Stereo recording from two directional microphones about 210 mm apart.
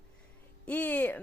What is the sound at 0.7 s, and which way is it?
Speech, 5° left (ahead or behind).